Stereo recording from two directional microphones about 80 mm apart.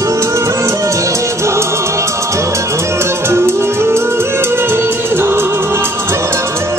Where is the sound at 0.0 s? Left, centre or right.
Right.